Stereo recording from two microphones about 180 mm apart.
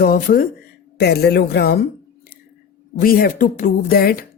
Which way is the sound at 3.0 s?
55° left (ahead or behind).